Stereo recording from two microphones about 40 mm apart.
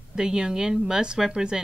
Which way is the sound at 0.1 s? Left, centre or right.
Centre.